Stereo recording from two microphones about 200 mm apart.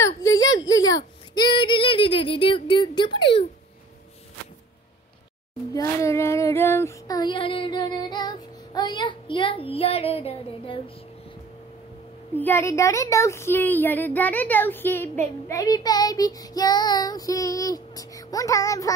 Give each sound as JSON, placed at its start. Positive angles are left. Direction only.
{"t": 0.0, "sound": "speech", "side_deg": 15}
{"t": 5.7, "sound": "child singing", "side_deg": 15}
{"t": 12.4, "sound": "speech", "side_deg": 10}